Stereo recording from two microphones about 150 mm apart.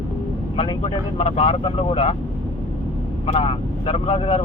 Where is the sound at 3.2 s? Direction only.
40° left (ahead or behind).